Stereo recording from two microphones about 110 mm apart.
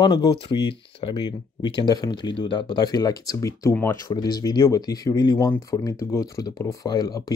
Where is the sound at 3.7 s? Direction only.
20° left (ahead or behind).